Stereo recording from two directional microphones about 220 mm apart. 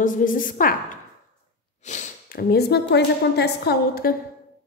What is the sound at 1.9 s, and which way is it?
A woman's voice, 40° left (ahead or behind).